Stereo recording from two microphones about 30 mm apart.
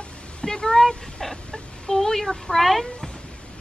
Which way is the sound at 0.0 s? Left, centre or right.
Left.